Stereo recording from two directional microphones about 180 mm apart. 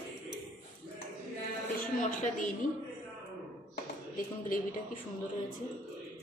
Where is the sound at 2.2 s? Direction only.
45° left (ahead or behind).